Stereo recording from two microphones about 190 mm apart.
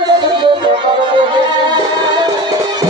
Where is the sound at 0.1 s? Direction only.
25° right (ahead or behind).